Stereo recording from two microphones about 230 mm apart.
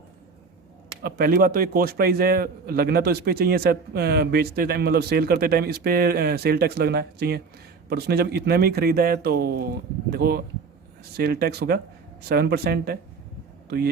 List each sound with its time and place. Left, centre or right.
1.0 s a man's voice: right